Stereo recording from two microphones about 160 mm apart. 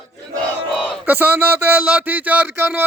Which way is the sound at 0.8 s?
10° right (ahead or behind).